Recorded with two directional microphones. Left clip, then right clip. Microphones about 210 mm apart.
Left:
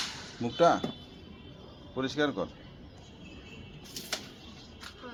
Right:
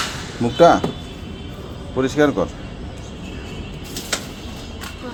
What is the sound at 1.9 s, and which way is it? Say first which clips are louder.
Speech: right 13 dB; 5° right (ahead or behind).